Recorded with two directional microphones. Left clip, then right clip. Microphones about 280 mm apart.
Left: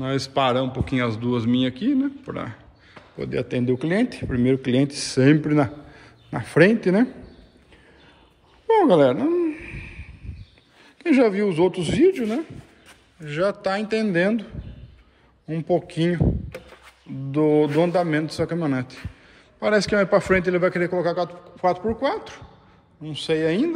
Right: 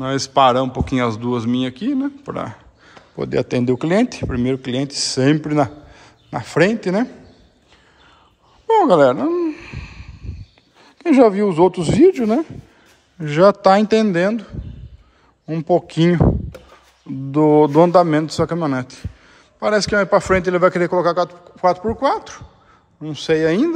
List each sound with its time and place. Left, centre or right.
0.0 s speech: centre
8.6 s a sound: centre
10.8 s speech: centre
17.3 s speech: centre